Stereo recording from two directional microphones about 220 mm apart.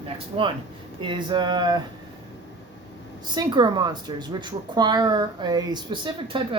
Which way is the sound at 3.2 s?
20° right (ahead or behind).